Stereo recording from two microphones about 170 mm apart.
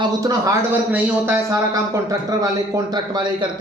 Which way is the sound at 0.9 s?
10° right (ahead or behind).